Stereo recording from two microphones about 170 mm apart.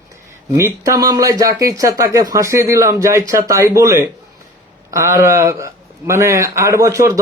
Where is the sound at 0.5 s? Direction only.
15° right (ahead or behind).